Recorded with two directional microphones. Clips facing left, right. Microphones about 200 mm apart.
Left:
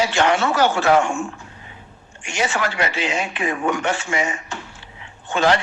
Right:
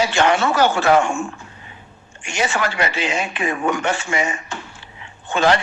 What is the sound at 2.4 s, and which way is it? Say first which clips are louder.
A man's voice: right 1 dB; 55° right (ahead or behind).